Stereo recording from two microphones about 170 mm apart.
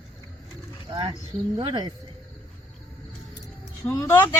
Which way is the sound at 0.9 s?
30° right (ahead or behind).